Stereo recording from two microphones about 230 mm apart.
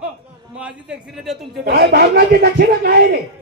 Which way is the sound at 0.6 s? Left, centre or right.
Centre.